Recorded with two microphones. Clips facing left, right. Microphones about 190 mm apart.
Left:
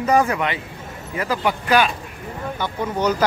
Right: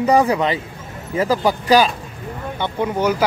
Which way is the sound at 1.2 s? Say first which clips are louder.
Right 4 dB; 35° right (ahead or behind).